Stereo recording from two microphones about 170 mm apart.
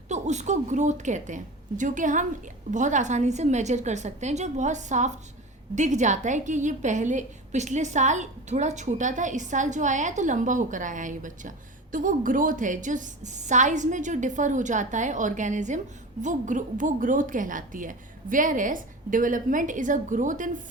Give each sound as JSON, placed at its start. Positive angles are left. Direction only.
{"t": 0.1, "sound": "a woman's voice", "side_deg": -45}